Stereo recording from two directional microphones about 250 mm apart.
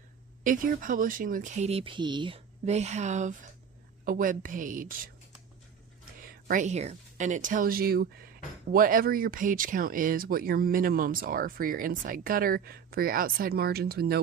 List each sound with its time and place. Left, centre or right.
0.4 s speech: right
6.2 s speech: right